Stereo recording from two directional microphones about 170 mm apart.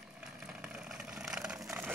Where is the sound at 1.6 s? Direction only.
15° right (ahead or behind).